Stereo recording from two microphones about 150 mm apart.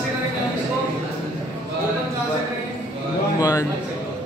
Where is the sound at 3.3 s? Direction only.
25° left (ahead or behind).